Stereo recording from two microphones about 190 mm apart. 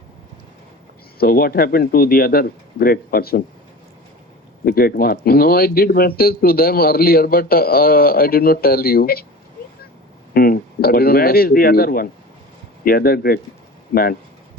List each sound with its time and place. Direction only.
1.2 s speech: 50° left (ahead or behind)
4.6 s speech: 50° left (ahead or behind)
10.3 s speech: 50° left (ahead or behind)